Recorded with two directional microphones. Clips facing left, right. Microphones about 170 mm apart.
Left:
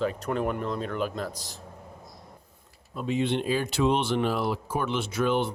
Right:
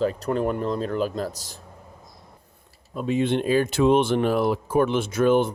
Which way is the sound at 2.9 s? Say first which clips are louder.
Right 4 dB; 50° right (ahead or behind).